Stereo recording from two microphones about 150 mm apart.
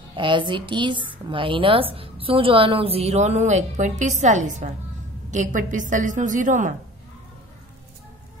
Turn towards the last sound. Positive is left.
turn(degrees=-60)  # may be behind; listen again after turning